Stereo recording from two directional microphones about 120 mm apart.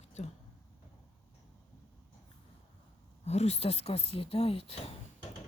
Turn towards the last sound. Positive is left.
turn(degrees=55)  # may be behind; listen again after turning